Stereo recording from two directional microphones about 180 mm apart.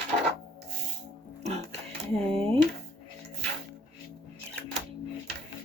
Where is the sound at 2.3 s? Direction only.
30° right (ahead or behind).